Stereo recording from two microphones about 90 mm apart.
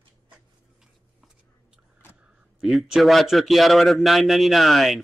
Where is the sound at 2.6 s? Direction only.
Centre (ahead or behind).